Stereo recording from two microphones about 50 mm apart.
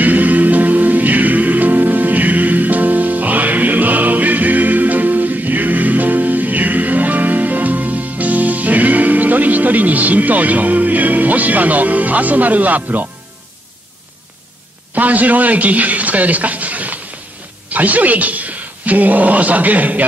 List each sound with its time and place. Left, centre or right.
0.0 s music: right
15.0 s a sound: right
17.6 s speech: right